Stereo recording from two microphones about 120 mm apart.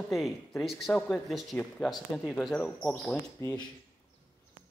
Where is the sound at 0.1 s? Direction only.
Centre (ahead or behind).